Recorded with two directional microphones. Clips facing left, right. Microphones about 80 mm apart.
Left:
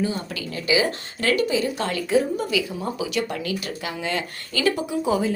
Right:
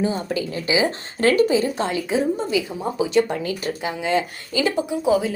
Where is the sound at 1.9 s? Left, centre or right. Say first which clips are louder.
Even; centre.